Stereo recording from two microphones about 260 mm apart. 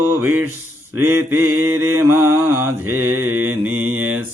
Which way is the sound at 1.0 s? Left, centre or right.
Centre.